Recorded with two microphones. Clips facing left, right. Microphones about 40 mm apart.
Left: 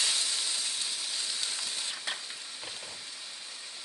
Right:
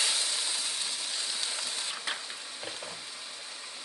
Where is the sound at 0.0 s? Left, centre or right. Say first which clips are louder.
Even; centre.